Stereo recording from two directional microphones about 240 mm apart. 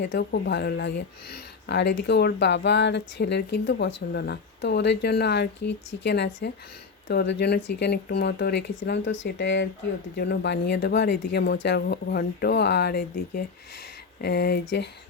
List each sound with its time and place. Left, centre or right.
0.0 s speech: left